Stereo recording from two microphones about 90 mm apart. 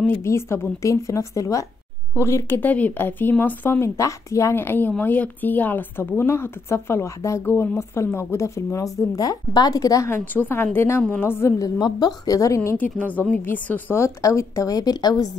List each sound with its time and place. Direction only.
0.2 s speech: 30° left (ahead or behind)
2.6 s a woman's voice: 20° left (ahead or behind)
3.8 s a woman's voice: 35° left (ahead or behind)
10.1 s a woman's voice: 25° left (ahead or behind)
11.6 s a woman's voice: 45° left (ahead or behind)
12.7 s a woman's voice: 20° left (ahead or behind)
14.0 s speech: 35° left (ahead or behind)